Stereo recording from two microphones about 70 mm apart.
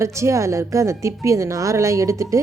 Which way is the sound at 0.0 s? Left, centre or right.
Right.